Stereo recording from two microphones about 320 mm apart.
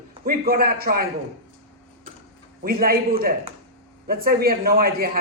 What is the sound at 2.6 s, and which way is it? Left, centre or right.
Speech, right.